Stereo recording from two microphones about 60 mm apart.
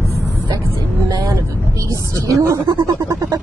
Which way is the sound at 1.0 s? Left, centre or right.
Right.